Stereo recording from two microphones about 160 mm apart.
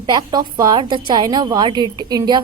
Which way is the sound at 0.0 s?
25° right (ahead or behind).